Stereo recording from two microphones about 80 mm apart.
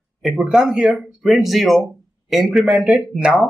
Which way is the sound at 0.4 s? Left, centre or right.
Centre.